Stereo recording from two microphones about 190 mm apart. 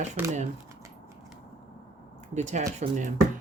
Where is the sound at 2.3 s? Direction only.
40° right (ahead or behind).